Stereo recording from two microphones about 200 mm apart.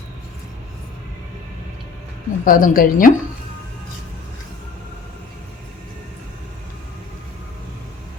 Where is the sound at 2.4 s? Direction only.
45° left (ahead or behind).